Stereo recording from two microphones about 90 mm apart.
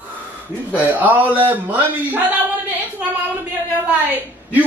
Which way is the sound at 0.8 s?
20° right (ahead or behind).